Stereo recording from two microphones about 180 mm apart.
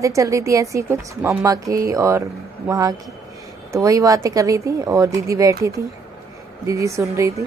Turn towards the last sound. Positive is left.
turn(degrees=-15)  # may be behind; listen again after turning